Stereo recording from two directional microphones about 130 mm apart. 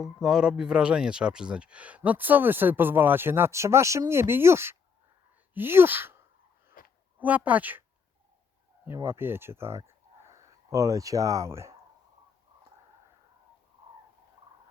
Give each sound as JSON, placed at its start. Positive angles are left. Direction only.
{"t": 0.0, "sound": "speech", "side_deg": -5}
{"t": 6.8, "sound": "a sound", "side_deg": 90}
{"t": 7.2, "sound": "speech", "side_deg": -10}
{"t": 8.9, "sound": "speech", "side_deg": -20}